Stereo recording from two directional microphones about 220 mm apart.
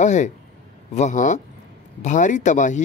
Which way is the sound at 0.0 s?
35° left (ahead or behind).